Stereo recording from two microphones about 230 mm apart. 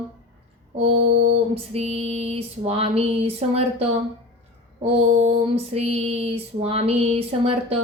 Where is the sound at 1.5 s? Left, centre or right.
Right.